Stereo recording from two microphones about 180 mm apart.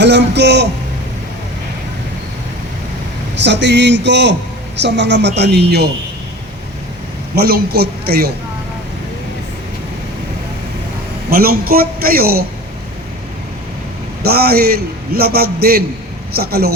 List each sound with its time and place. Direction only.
0.0 s a sound: 70° right (ahead or behind)
3.4 s speech: 75° right (ahead or behind)
7.3 s a man's voice: 55° right (ahead or behind)
11.3 s a man's voice: 55° right (ahead or behind)
14.2 s a man's voice: 60° right (ahead or behind)